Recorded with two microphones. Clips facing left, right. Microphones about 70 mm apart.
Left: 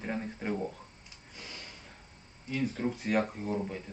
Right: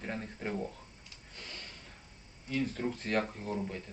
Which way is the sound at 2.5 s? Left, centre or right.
Centre.